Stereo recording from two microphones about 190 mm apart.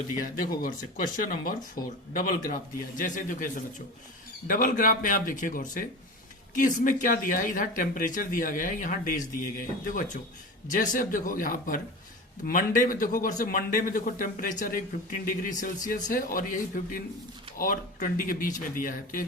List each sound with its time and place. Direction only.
0.2 s speech: 45° left (ahead or behind)